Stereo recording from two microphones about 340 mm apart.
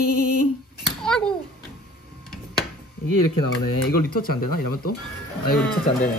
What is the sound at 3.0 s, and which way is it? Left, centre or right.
Speech, left.